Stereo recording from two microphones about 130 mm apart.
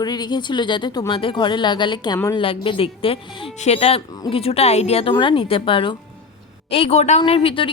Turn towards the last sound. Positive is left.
turn(degrees=45)  # may be behind; listen again after turning